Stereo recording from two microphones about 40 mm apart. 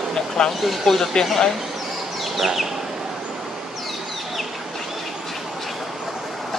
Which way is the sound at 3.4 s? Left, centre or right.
Centre.